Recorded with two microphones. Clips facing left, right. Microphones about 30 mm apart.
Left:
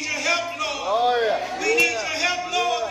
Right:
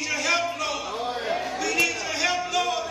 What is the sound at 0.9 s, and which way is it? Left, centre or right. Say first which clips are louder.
Speech: left 10 dB; left.